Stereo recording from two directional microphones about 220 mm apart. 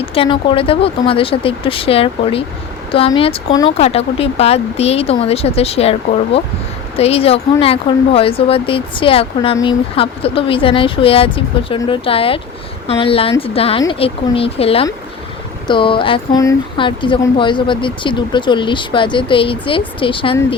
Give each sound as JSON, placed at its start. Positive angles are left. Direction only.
{"t": 0.0, "sound": "speech", "side_deg": 25}